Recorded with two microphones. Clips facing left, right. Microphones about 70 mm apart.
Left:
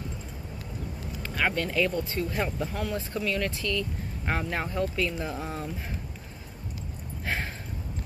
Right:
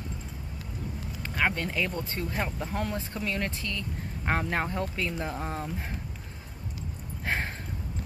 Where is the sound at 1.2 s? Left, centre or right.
Right.